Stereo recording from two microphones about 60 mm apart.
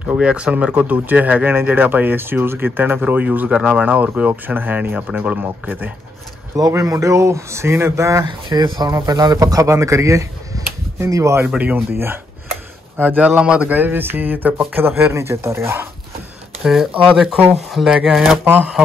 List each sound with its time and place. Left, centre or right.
0.0 s speech: centre
6.8 s speech: right
11.4 s speech: right
11.9 s speech: right
13.0 s speech: right
16.6 s speech: centre